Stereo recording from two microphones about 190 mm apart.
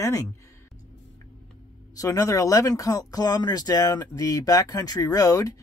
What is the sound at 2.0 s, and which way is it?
Speech, 15° left (ahead or behind).